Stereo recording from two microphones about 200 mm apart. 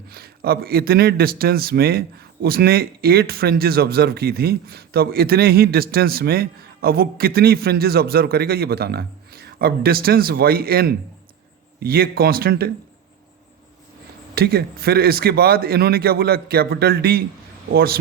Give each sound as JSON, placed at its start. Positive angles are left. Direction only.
{"t": 0.1, "sound": "speech", "side_deg": -50}
{"t": 14.3, "sound": "speech", "side_deg": -50}